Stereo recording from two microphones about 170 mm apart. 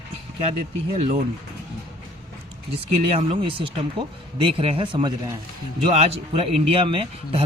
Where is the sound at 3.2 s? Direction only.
35° right (ahead or behind).